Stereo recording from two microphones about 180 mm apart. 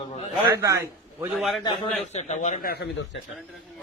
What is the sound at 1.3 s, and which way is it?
Speech, centre (ahead or behind).